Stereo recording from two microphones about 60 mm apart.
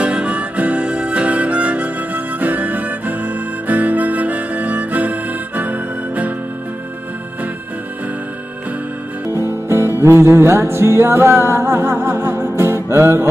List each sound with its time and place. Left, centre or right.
0.0 s harmonica: centre
9.7 s music: right